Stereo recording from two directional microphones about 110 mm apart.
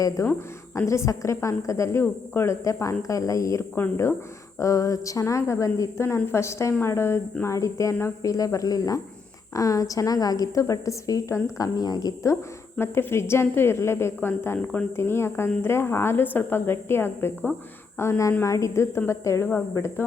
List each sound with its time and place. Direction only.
0.2 s a woman's voice: 30° left (ahead or behind)